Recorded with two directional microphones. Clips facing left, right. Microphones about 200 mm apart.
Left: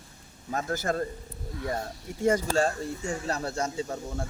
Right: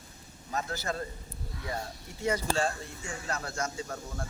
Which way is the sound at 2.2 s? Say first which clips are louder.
Left 5 dB; 45° left (ahead or behind).